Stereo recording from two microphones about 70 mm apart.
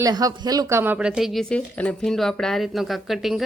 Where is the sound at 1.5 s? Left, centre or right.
Left.